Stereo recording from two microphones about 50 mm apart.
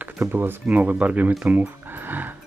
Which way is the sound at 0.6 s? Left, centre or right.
Right.